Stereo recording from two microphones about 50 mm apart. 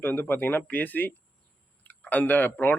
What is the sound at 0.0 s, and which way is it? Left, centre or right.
Speech, left.